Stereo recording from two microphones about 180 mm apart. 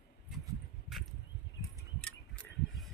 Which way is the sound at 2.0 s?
5° left (ahead or behind).